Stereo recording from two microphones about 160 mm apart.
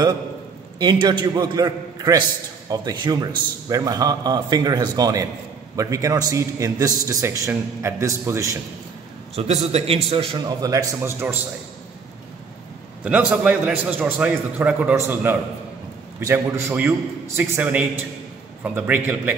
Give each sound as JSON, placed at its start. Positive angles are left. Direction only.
{"t": 0.7, "sound": "a man's voice", "side_deg": -25}
{"t": 9.7, "sound": "a man's voice", "side_deg": -40}
{"t": 10.3, "sound": "a man's voice", "side_deg": -20}
{"t": 13.0, "sound": "a man's voice", "side_deg": -5}